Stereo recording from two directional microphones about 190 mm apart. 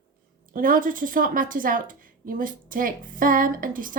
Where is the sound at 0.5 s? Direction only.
45° right (ahead or behind).